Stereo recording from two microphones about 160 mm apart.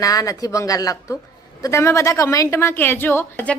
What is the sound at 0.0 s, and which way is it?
A woman's voice, 20° left (ahead or behind).